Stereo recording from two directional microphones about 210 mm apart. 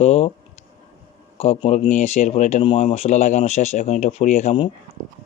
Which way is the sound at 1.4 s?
30° left (ahead or behind).